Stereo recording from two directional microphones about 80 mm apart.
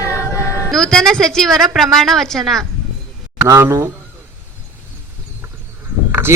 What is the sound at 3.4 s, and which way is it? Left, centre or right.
Speech, right.